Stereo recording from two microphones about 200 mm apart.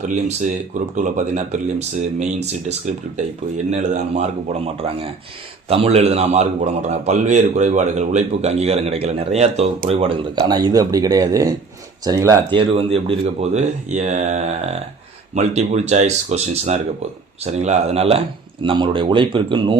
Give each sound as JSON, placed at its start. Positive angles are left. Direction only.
{"t": 0.9, "sound": "a man's voice", "side_deg": -40}